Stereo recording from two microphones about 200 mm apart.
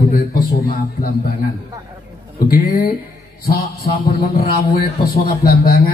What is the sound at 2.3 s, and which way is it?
Speech, 45° left (ahead or behind).